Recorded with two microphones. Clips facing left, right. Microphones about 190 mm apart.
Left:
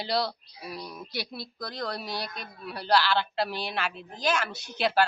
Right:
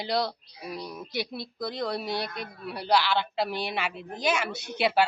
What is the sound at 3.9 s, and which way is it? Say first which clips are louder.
Speech: right 5 dB; 60° right (ahead or behind).